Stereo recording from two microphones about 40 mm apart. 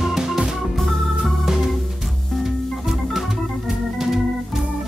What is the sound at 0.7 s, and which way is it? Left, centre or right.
Organ, centre.